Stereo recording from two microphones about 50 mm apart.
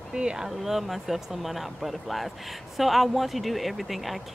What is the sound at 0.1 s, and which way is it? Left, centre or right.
Speech, centre.